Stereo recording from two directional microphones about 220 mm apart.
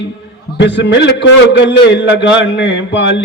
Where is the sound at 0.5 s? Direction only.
55° left (ahead or behind).